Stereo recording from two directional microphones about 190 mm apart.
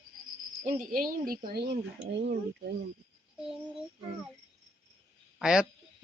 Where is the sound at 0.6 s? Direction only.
45° right (ahead or behind); by 2.7 s 65° right (ahead or behind).